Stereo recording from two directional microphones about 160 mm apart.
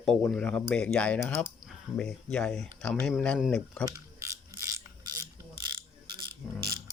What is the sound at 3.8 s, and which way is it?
Mechanisms, 20° right (ahead or behind).